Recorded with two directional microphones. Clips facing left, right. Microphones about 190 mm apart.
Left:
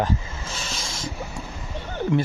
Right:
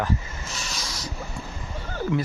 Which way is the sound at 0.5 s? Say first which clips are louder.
Left 1 dB; 25° left (ahead or behind).